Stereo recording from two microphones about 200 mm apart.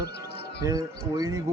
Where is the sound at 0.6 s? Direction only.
15° right (ahead or behind).